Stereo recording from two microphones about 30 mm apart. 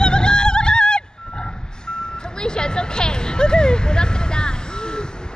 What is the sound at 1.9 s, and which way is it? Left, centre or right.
Reversing beeps, left.